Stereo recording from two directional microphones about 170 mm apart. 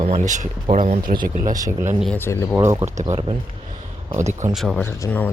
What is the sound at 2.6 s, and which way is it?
Speech, 15° right (ahead or behind).